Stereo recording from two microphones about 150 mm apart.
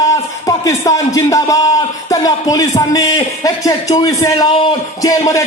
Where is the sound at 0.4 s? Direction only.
20° left (ahead or behind).